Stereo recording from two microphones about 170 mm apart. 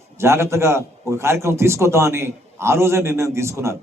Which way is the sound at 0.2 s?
15° right (ahead or behind).